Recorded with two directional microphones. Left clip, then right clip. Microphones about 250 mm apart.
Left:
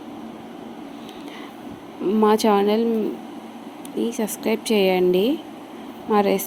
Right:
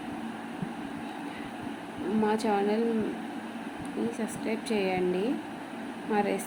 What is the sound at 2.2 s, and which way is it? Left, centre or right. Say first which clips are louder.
Speech: left 10 dB; left.